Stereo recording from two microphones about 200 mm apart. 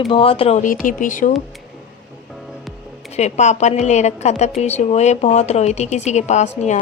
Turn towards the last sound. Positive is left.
turn(degrees=35)  # may be behind; listen again after turning